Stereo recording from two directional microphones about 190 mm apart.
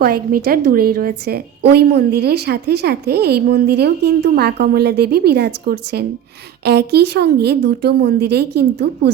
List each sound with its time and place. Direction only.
0.0 s a woman's voice: 50° right (ahead or behind)